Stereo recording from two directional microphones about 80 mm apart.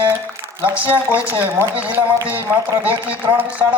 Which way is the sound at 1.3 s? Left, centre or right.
Right.